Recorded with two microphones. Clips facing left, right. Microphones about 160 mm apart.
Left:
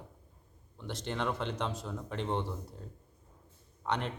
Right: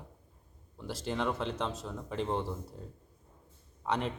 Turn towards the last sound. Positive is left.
turn(degrees=-5)  # may be behind; listen again after turning